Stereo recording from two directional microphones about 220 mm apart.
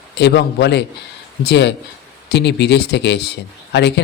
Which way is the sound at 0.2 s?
50° left (ahead or behind).